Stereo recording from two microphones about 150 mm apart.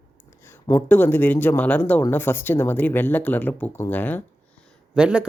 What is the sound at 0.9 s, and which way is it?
Speech, 10° left (ahead or behind).